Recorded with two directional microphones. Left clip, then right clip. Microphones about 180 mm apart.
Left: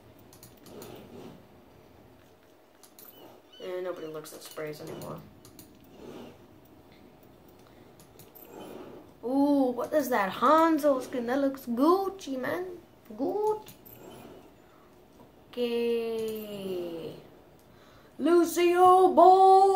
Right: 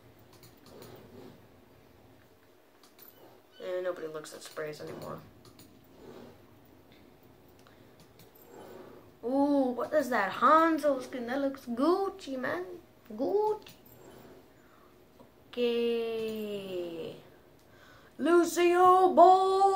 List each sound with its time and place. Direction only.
3.6 s speech: 10° left (ahead or behind)
9.4 s speech: 10° left (ahead or behind)
15.5 s female singing: 10° left (ahead or behind)
18.2 s female singing: 5° left (ahead or behind)